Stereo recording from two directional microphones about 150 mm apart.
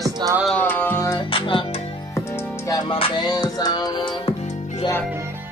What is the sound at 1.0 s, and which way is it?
Music, 30° left (ahead or behind).